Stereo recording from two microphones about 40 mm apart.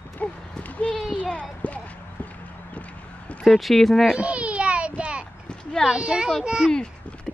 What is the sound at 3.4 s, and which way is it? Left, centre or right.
Speech, centre.